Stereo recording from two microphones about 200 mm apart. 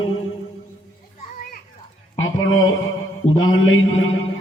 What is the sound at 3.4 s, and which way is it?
Speech, 90° left.